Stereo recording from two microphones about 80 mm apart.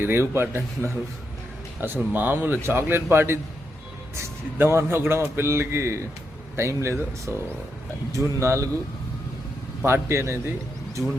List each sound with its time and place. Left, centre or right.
0.0 s speech: right
1.8 s a man's voice: right
9.8 s a man's voice: right